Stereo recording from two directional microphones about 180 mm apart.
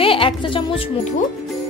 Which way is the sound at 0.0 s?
30° left (ahead or behind).